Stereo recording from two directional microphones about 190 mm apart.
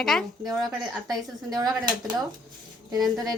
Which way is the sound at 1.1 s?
20° right (ahead or behind).